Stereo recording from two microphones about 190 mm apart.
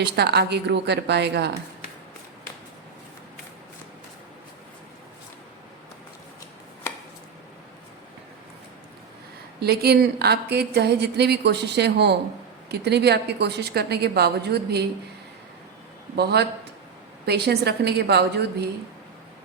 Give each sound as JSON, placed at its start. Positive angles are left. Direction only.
{"t": 0.0, "sound": "speech", "side_deg": -60}
{"t": 9.6, "sound": "speech", "side_deg": -55}
{"t": 16.1, "sound": "speech", "side_deg": -60}